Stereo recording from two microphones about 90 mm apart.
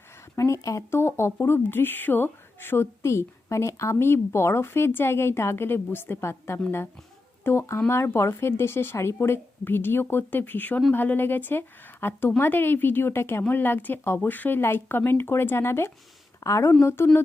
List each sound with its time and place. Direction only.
0.3 s a woman's voice: 35° left (ahead or behind)